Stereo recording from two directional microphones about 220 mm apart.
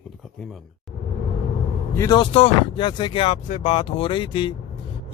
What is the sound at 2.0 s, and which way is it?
Speech, 20° left (ahead or behind).